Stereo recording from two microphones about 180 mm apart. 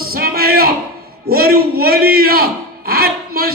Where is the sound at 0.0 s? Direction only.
55° right (ahead or behind).